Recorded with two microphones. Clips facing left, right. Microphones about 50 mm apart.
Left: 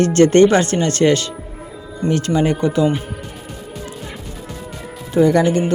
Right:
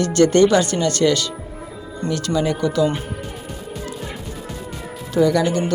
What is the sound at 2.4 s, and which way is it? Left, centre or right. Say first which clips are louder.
Speech: left 1 dB; left.